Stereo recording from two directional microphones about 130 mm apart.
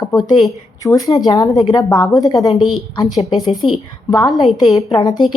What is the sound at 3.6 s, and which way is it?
Speech, 45° left (ahead or behind).